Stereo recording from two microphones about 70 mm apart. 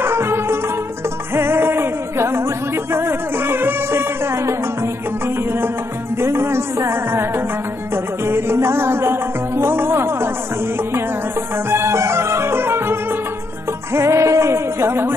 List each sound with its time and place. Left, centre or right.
0.0 s music: right
11.5 s music: right